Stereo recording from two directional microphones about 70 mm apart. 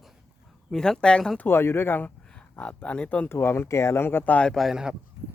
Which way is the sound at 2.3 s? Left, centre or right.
Centre.